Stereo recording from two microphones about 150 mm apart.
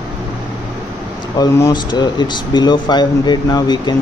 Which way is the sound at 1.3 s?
20° left (ahead or behind).